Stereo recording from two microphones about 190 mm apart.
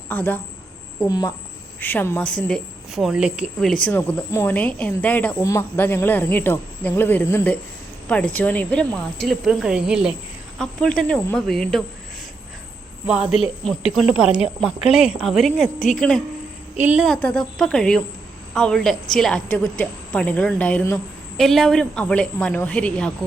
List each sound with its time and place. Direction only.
0.1 s a woman's voice: 10° left (ahead or behind)
13.3 s a woman's voice: centre (ahead or behind)
17.2 s a woman's voice: 5° left (ahead or behind)
21.3 s a woman's voice: centre (ahead or behind)